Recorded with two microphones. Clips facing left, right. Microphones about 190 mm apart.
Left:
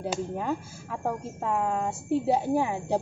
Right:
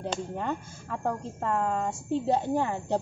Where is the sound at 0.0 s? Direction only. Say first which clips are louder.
Left 2 dB; 5° left (ahead or behind).